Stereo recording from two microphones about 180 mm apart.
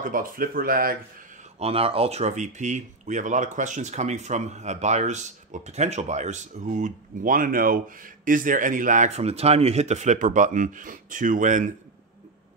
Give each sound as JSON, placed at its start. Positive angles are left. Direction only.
{"t": 0.0, "sound": "speech", "side_deg": -50}
{"t": 1.6, "sound": "speech", "side_deg": -30}